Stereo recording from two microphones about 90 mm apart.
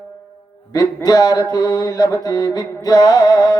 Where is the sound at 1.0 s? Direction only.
45° left (ahead or behind).